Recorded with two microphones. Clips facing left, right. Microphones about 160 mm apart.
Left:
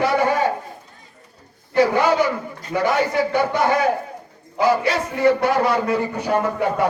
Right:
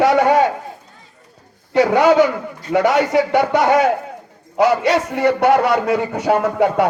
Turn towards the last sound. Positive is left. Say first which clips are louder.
# right 4 dB
turn(degrees=-85)